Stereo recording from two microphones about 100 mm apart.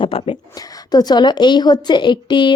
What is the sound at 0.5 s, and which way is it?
Speech, 40° left (ahead or behind).